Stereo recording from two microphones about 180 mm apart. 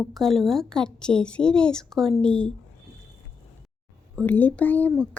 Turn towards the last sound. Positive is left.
turn(degrees=10)  # may be behind; listen again after turning